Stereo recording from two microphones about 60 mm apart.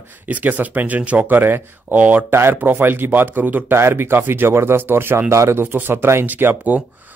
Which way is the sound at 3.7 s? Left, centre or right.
Right.